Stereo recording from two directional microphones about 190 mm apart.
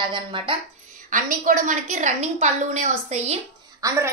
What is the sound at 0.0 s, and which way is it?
Speech, 25° right (ahead or behind).